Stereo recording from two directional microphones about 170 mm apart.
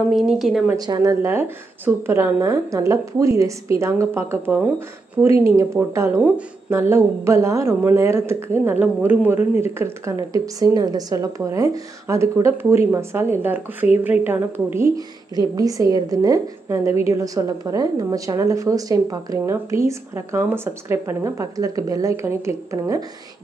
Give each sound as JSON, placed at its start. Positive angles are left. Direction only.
{"t": 0.1, "sound": "speech", "side_deg": 0}
{"t": 0.7, "sound": "a woman's voice", "side_deg": -25}